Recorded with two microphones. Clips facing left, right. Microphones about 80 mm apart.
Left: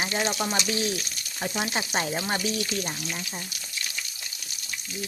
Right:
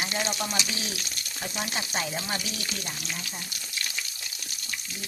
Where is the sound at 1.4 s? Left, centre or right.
Left.